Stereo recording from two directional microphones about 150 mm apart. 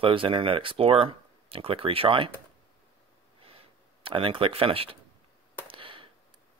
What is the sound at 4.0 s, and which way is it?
Speech, 35° right (ahead or behind).